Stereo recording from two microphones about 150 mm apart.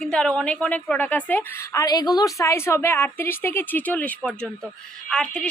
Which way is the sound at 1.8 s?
25° left (ahead or behind).